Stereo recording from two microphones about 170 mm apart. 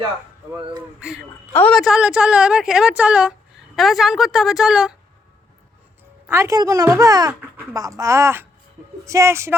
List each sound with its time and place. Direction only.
0.9 s speech: 5° right (ahead or behind)
6.2 s a woman's voice: 15° right (ahead or behind)